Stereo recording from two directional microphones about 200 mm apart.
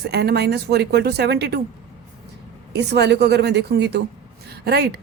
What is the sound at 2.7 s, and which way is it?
Speech, 55° right (ahead or behind).